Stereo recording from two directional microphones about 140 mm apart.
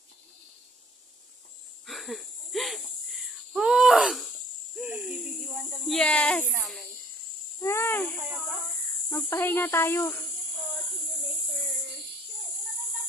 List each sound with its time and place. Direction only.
1.9 s wheeze: centre (ahead or behind)
4.7 s hoot: 5° right (ahead or behind)
5.9 s speech: 5° left (ahead or behind)
7.6 s speech: 15° left (ahead or behind)
9.1 s speech: 15° left (ahead or behind)